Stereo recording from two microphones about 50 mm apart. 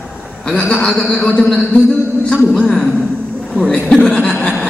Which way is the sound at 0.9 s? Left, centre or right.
Centre.